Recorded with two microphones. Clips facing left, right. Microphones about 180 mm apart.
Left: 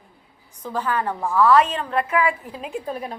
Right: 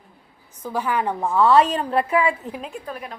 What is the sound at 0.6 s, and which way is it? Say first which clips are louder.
A woman's voice: right 1 dB; 10° right (ahead or behind).